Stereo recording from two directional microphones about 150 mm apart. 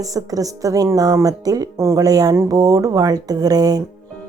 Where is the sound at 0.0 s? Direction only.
25° right (ahead or behind).